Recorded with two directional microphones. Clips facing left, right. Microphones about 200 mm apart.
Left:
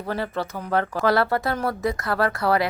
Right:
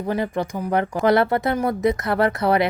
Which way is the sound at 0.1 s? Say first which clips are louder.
Right 3 dB; 15° right (ahead or behind).